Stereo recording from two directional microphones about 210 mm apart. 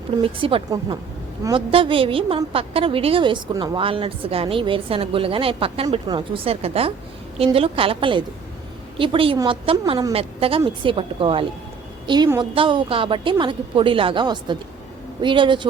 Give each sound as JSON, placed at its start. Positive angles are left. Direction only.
{"t": 0.2, "sound": "a woman's voice", "side_deg": -25}